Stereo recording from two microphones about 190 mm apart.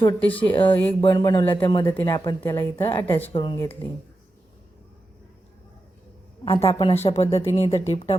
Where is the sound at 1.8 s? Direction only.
15° left (ahead or behind).